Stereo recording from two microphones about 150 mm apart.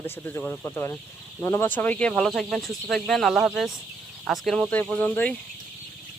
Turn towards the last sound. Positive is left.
turn(degrees=10)  # may be behind; listen again after turning